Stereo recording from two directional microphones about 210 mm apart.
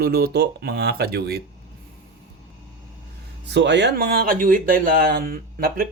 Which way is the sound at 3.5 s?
55° right (ahead or behind).